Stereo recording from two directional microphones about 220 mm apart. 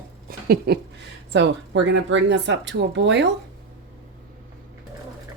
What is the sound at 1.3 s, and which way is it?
Speech, 55° right (ahead or behind).